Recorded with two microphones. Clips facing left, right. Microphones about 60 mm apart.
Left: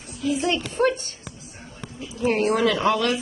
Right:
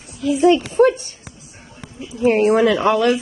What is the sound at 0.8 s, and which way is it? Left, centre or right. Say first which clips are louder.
Speech: right 7 dB; centre.